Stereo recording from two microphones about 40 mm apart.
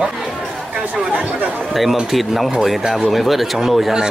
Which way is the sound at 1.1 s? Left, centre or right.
Right.